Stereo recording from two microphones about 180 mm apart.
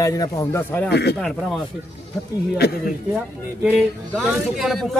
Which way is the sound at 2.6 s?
60° left (ahead or behind).